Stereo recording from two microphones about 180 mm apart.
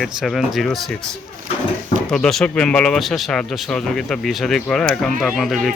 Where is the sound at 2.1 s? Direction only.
5° left (ahead or behind).